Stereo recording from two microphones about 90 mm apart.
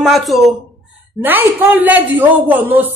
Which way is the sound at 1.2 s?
20° right (ahead or behind).